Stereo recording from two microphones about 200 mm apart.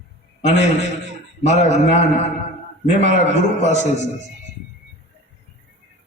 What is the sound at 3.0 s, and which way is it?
A man's voice, 35° left (ahead or behind).